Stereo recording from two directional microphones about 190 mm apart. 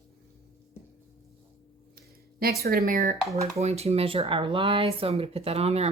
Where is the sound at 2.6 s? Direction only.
50° right (ahead or behind).